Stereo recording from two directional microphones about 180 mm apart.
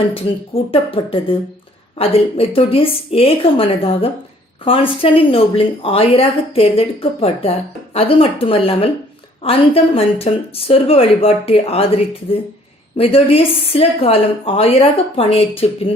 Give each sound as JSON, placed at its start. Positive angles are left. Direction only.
{"t": 0.1, "sound": "a woman's voice", "side_deg": 30}
{"t": 13.0, "sound": "a woman's voice", "side_deg": 30}